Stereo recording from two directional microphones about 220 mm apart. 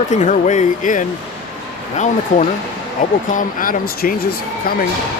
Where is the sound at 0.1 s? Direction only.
35° left (ahead or behind).